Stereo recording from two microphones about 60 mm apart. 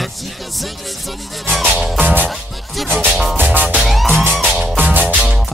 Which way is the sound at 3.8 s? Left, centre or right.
Centre.